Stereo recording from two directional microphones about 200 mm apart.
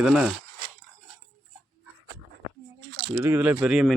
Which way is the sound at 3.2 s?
10° right (ahead or behind).